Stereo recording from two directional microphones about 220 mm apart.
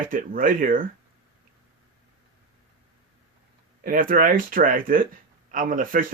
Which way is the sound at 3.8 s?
40° right (ahead or behind).